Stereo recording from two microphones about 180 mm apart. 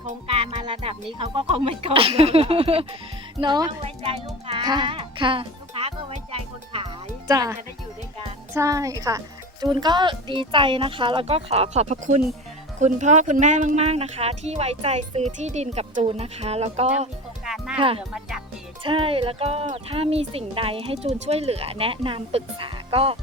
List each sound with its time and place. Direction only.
0.0 s a child's voice: 35° right (ahead or behind)
7.3 s speech: 20° right (ahead or behind); by 17.1 s 35° right (ahead or behind)
17.4 s music: 5° right (ahead or behind)
17.7 s speech: 30° right (ahead or behind)
18.1 s speech: 5° right (ahead or behind)
18.8 s speech: 30° right (ahead or behind)